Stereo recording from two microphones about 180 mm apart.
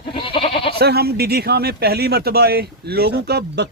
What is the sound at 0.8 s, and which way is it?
Speech, 60° right (ahead or behind).